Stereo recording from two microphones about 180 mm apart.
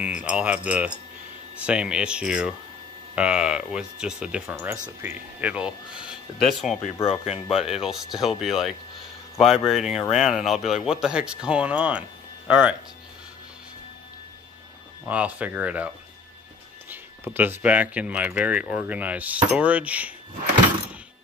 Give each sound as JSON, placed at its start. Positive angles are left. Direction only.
{"t": 0.0, "sound": "speech", "side_deg": -5}
{"t": 6.8, "sound": "speech", "side_deg": 35}
{"t": 7.6, "sound": "speech", "side_deg": -5}
{"t": 15.0, "sound": "speech", "side_deg": -10}
{"t": 16.9, "sound": "speech", "side_deg": -10}